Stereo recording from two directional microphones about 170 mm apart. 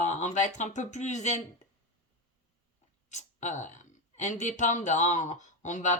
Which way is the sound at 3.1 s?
45° left (ahead or behind).